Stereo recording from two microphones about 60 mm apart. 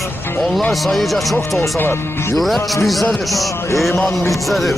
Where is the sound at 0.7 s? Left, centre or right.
Centre.